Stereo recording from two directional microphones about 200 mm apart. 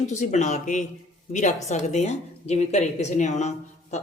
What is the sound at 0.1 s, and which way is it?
Speech, 35° left (ahead or behind).